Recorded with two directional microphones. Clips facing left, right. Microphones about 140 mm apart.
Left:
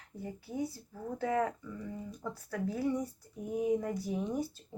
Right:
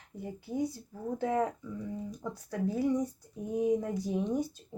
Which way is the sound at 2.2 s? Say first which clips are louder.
Right 3 dB; 20° right (ahead or behind).